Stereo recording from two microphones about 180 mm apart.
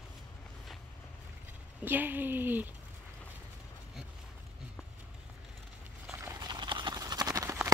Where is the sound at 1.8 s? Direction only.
10° right (ahead or behind).